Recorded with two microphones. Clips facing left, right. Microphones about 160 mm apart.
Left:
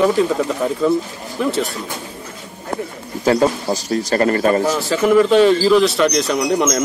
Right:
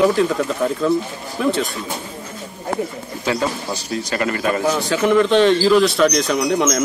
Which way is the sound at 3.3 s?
40° left (ahead or behind).